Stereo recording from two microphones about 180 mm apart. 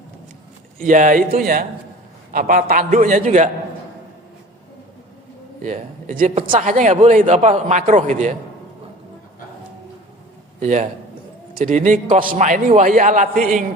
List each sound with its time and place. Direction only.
0.8 s a man's voice: 45° right (ahead or behind)
2.3 s a man's voice: 50° right (ahead or behind)
5.6 s a man's voice: 40° right (ahead or behind)
10.6 s a man's voice: 40° right (ahead or behind)